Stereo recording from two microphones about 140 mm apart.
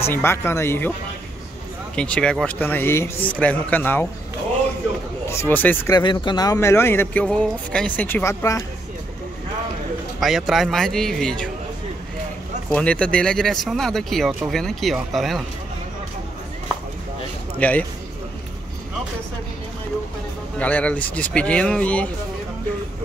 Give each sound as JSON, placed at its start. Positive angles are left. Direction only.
{"t": 0.0, "sound": "speech", "side_deg": 15}
{"t": 2.0, "sound": "speech", "side_deg": 5}
{"t": 5.3, "sound": "speech", "side_deg": 15}
{"t": 5.9, "sound": "speech", "side_deg": 30}
{"t": 10.2, "sound": "speech", "side_deg": 0}
{"t": 12.7, "sound": "speech", "side_deg": 10}
{"t": 17.6, "sound": "speech", "side_deg": 10}
{"t": 20.5, "sound": "speech", "side_deg": 10}